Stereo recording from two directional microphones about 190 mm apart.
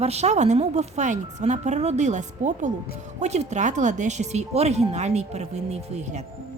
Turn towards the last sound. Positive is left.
turn(degrees=-35)  # may be behind; listen again after turning